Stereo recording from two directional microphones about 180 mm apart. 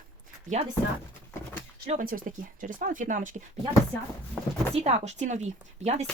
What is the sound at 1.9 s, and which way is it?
Speech, 50° right (ahead or behind).